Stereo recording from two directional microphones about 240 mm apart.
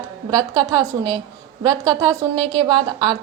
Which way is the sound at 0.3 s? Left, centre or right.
Centre.